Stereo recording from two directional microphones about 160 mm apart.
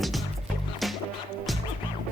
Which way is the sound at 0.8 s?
Centre (ahead or behind).